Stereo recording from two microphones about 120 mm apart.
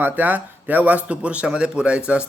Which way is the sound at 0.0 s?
15° right (ahead or behind).